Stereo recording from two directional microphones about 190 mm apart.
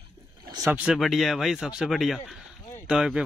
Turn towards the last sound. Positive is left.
turn(degrees=-5)  # may be behind; listen again after turning